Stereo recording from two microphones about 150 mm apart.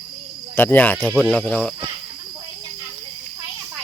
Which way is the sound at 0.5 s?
10° left (ahead or behind).